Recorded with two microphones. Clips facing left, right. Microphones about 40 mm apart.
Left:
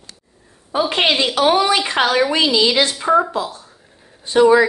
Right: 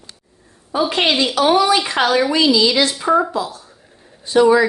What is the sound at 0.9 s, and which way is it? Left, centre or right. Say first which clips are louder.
A woman's voice: left 1 dB; left.